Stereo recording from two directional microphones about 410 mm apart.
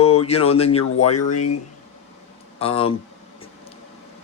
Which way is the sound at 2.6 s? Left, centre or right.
Centre.